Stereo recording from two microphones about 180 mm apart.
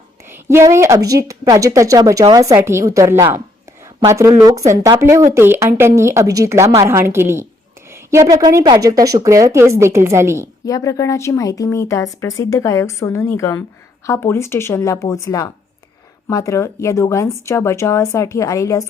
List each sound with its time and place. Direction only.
0.3 s a woman's voice: 15° right (ahead or behind)
10.7 s speech: 20° left (ahead or behind)